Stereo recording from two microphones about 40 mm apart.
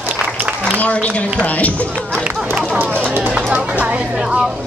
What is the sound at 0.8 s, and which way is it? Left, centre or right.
Speech, left.